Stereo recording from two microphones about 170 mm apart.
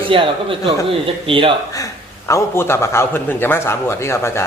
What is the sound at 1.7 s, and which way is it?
A man's voice, 20° left (ahead or behind).